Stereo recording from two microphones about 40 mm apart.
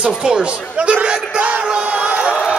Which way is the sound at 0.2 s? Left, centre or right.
Right.